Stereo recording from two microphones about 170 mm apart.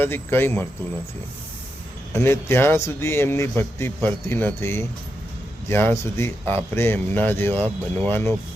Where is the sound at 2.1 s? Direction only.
15° left (ahead or behind).